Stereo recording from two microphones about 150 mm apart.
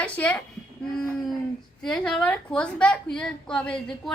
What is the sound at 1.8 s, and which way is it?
A woman's voice, 5° left (ahead or behind).